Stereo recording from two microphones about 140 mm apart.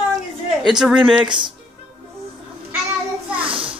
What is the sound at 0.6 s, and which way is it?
Speech, 5° right (ahead or behind).